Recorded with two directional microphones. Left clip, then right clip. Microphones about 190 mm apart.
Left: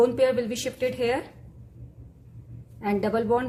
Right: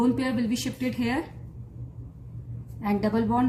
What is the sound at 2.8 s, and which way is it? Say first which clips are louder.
Speech: left 2 dB; 35° left (ahead or behind).